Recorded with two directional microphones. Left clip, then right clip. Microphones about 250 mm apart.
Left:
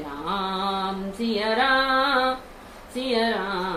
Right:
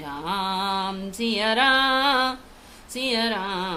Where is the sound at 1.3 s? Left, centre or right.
Right.